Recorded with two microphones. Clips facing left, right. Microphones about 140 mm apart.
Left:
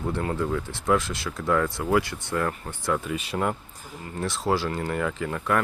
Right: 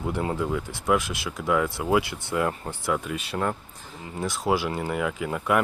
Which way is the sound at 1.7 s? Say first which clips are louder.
Even; 15° right (ahead or behind).